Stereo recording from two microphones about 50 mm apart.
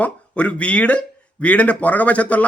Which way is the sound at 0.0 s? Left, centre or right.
Left.